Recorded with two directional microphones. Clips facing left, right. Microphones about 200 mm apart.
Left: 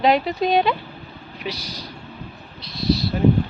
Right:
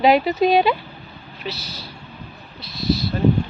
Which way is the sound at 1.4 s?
15° left (ahead or behind).